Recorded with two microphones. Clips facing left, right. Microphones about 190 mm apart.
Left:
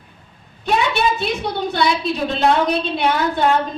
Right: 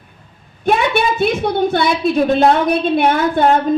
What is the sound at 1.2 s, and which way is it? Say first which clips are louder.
A woman's voice: right 7 dB; 55° right (ahead or behind).